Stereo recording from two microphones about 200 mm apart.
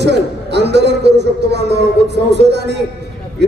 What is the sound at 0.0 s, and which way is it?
A man's voice, 60° right (ahead or behind).